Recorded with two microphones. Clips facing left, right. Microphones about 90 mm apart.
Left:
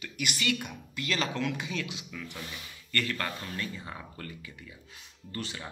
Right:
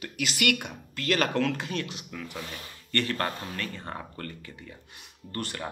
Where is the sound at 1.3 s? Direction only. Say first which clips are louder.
Right 5 dB; 5° left (ahead or behind).